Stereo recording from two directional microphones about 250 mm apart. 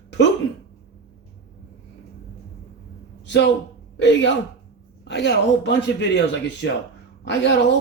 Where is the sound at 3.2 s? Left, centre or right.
Left.